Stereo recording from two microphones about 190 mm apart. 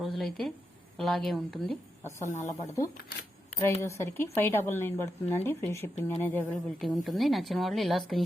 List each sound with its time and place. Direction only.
0.0 s a woman's voice: centre (ahead or behind)
2.3 s a woman's voice: 15° left (ahead or behind)